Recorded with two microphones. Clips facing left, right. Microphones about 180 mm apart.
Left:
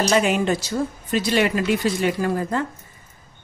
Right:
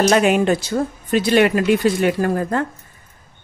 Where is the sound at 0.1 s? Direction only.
60° right (ahead or behind).